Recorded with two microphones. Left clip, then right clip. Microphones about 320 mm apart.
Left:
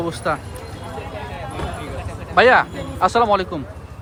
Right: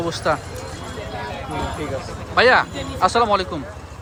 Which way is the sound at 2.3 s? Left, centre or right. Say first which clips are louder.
Left 2 dB; centre.